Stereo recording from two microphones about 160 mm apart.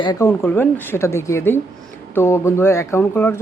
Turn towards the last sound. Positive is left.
turn(degrees=10)  # may be behind; listen again after turning